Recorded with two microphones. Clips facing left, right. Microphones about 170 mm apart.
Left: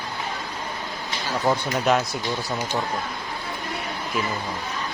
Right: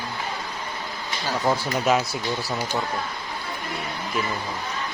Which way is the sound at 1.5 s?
Centre (ahead or behind).